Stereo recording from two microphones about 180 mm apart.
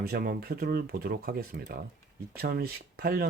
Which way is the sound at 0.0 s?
55° right (ahead or behind).